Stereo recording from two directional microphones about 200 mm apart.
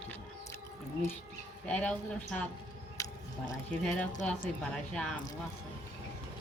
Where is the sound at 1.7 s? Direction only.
5° left (ahead or behind).